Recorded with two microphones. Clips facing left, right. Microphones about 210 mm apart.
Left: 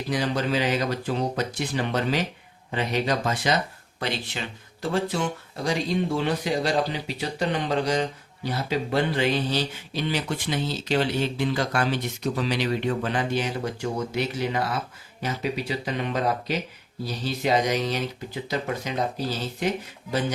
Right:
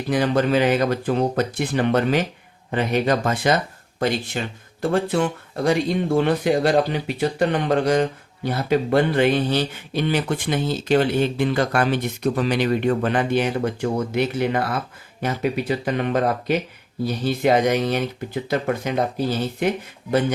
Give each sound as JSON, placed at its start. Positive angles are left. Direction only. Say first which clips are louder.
{"t": 0.1, "sound": "speech", "louder": "right 7 dB", "side_deg": -55}